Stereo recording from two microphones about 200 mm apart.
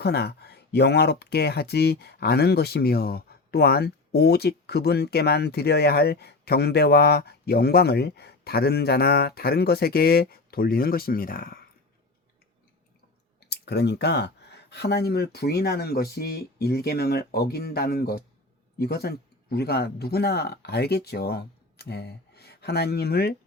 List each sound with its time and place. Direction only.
0.0 s speech: 55° left (ahead or behind)
13.5 s speech: 55° left (ahead or behind)